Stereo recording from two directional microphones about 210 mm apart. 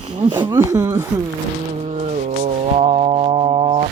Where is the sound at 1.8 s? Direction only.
35° right (ahead or behind).